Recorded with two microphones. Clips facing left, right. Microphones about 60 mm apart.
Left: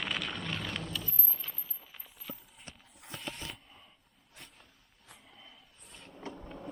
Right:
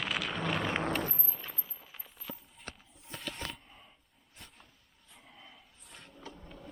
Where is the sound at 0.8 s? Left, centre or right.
Right.